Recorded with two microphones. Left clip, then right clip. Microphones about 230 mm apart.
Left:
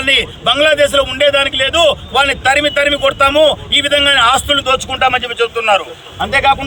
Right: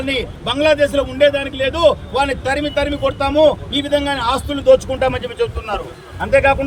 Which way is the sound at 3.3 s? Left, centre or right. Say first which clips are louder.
Left 3 dB; centre.